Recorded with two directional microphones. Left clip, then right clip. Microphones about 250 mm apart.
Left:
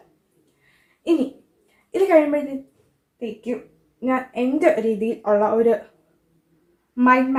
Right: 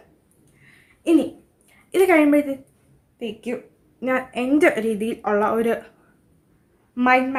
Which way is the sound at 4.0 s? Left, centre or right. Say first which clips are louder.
Left 1 dB; right.